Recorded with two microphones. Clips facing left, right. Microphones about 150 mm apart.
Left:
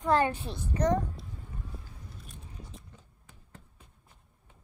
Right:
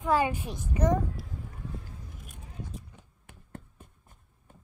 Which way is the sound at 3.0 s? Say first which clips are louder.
Right 3 dB; 60° right (ahead or behind).